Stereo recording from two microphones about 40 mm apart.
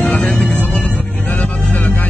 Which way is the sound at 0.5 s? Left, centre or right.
Left.